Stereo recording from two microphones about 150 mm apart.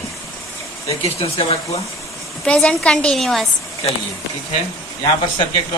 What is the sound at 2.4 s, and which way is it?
A woman's voice, 5° left (ahead or behind).